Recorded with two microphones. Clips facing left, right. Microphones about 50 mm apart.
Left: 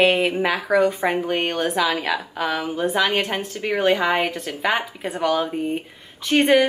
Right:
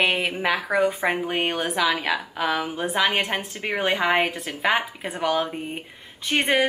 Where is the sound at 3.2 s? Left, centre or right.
Centre.